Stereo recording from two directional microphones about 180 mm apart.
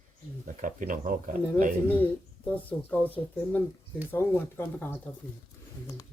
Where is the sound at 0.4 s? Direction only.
45° right (ahead or behind).